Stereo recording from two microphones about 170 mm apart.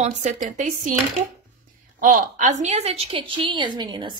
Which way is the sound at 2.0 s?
45° right (ahead or behind).